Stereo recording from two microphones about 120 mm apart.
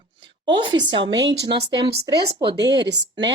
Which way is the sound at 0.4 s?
40° right (ahead or behind).